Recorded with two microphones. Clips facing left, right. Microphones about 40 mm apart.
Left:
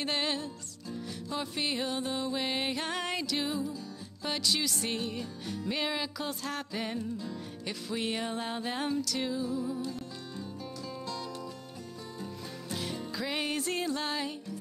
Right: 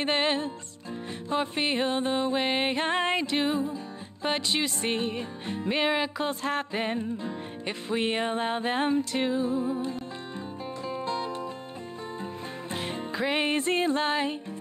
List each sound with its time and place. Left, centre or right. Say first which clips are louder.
0.0 s music: right 6 dB; right
12.7 s music: right 4 dB; right